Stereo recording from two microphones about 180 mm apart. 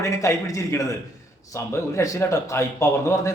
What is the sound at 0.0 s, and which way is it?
A man's voice, 15° left (ahead or behind).